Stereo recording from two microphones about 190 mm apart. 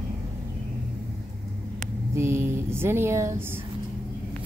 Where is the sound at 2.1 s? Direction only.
15° right (ahead or behind).